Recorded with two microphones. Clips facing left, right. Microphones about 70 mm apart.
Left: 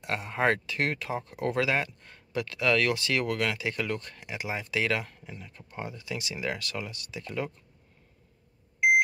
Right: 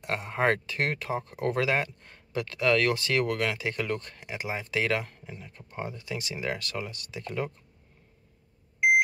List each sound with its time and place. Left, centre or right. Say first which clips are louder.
0.0 s speech: even; right
5.9 s speech: even; right